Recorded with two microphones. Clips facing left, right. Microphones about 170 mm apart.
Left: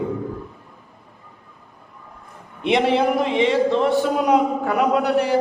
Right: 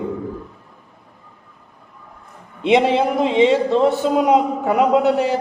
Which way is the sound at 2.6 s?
20° right (ahead or behind).